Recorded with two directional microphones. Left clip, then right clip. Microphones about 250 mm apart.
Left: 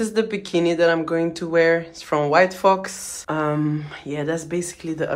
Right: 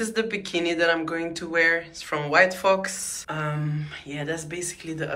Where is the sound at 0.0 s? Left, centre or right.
Centre.